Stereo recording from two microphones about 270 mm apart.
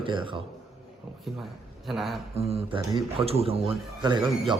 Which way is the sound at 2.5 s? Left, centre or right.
Right.